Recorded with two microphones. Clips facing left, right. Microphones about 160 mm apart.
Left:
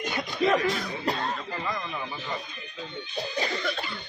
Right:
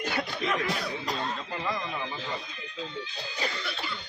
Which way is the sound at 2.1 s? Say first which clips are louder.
Left 1 dB; 90° right.